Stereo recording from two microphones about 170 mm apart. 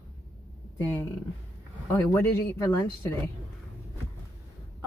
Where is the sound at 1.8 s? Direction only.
15° left (ahead or behind).